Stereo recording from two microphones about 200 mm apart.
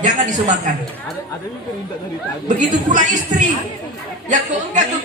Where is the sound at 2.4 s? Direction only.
35° right (ahead or behind).